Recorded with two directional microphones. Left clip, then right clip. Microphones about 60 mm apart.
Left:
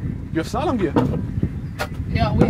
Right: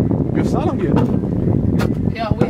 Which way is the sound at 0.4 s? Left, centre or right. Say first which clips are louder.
Left 1 dB; left.